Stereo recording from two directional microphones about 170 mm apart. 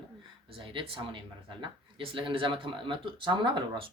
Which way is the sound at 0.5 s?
30° right (ahead or behind).